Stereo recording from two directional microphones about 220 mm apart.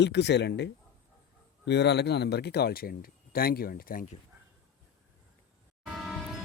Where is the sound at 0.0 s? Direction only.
50° left (ahead or behind).